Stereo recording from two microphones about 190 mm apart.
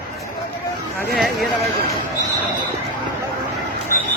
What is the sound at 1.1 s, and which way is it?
Speech, centre (ahead or behind).